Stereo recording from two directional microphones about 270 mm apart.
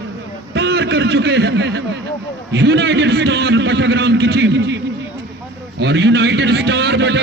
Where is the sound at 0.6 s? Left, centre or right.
Right.